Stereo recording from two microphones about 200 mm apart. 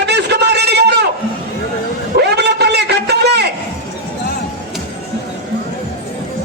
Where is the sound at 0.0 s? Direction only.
55° right (ahead or behind).